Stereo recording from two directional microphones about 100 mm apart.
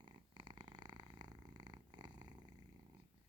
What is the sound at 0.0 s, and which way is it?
Purr, 45° right (ahead or behind).